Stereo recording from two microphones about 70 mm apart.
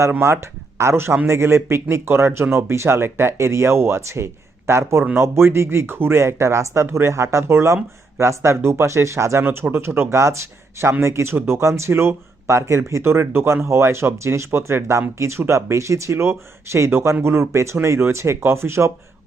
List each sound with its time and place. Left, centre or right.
0.1 s speech: right